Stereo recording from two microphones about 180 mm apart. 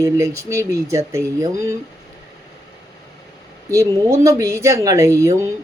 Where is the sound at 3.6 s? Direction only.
15° right (ahead or behind).